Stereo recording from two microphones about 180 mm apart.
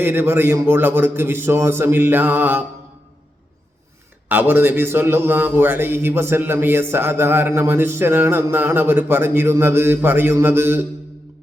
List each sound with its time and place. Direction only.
0.0 s a man's voice: 10° right (ahead or behind)
4.3 s a man's voice: 10° right (ahead or behind)